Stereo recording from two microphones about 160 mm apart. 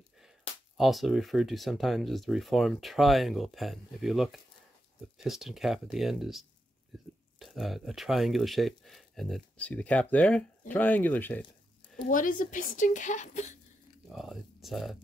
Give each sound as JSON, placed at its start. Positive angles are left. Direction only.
{"t": 0.7, "sound": "speech", "side_deg": 0}
{"t": 12.1, "sound": "a woman's voice", "side_deg": 55}
{"t": 14.0, "sound": "speech", "side_deg": 0}